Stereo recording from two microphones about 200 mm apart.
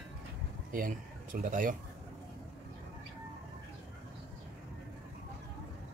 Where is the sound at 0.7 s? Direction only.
45° right (ahead or behind).